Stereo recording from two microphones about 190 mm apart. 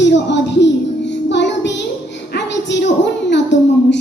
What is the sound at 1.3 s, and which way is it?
Child singing, 70° left (ahead or behind).